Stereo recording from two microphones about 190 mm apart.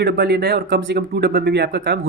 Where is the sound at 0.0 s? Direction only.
60° right (ahead or behind).